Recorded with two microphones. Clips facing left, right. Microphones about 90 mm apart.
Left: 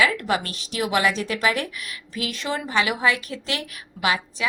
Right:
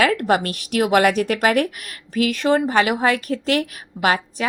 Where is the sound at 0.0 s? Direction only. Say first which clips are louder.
Right 4 dB; 50° right (ahead or behind).